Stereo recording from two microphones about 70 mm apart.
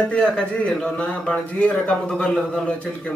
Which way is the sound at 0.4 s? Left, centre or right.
Centre.